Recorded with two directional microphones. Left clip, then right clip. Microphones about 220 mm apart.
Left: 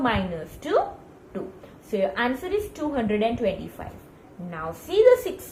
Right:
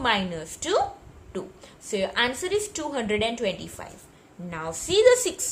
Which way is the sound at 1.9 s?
50° right (ahead or behind).